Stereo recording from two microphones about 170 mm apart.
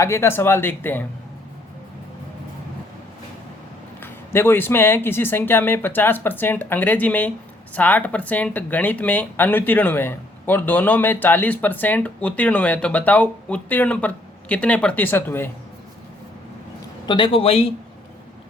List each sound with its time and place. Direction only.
0.0 s speech: 15° left (ahead or behind)
4.0 s speech: 15° left (ahead or behind)
17.1 s speech: 30° left (ahead or behind)